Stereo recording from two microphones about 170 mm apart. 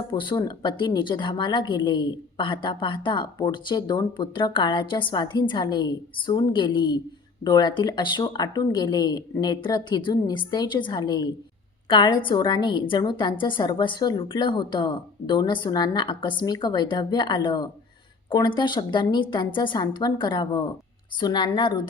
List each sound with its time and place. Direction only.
0.1 s speech: 30° left (ahead or behind)